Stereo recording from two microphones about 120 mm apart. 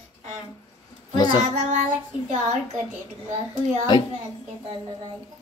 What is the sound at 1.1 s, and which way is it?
Speech, 35° left (ahead or behind).